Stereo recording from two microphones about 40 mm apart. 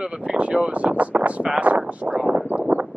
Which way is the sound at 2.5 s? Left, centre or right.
Right.